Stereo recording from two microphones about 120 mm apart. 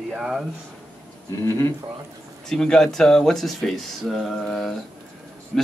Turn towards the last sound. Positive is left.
turn(degrees=0)  # may be behind; listen again after turning